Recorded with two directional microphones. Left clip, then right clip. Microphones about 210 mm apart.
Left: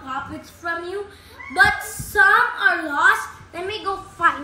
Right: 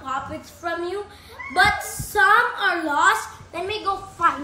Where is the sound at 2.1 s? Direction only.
25° right (ahead or behind).